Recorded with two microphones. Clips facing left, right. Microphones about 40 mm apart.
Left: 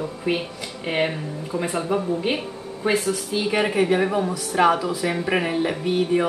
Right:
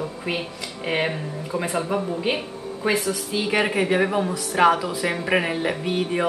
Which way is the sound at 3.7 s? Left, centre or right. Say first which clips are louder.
Left 1 dB; centre.